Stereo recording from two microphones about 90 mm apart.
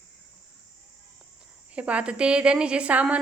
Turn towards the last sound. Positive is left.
turn(degrees=-15)  # may be behind; listen again after turning